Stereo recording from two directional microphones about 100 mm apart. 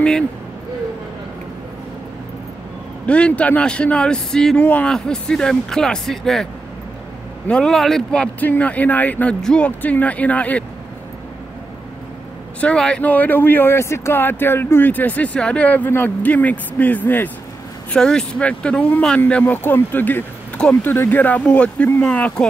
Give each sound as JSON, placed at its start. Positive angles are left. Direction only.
{"t": 3.1, "sound": "speech", "side_deg": 10}
{"t": 7.4, "sound": "speech", "side_deg": 5}
{"t": 12.5, "sound": "speech", "side_deg": 10}
{"t": 17.9, "sound": "speech", "side_deg": 5}